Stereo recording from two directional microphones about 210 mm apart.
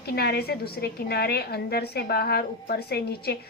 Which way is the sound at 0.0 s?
50° left (ahead or behind).